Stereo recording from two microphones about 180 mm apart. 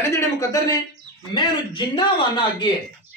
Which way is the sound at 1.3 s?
25° left (ahead or behind).